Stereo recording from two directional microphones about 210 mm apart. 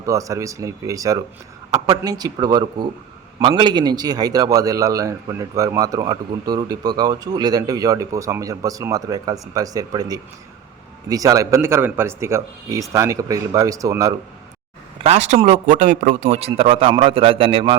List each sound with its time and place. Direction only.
0.0 s a man's voice: 15° right (ahead or behind)
15.0 s a man's voice: 30° right (ahead or behind)